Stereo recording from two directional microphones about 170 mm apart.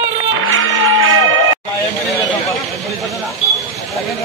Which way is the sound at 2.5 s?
Centre (ahead or behind).